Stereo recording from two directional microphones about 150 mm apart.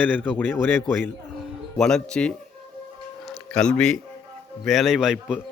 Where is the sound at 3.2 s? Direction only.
5° left (ahead or behind).